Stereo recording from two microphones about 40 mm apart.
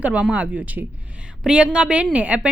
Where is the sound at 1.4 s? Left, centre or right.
Right.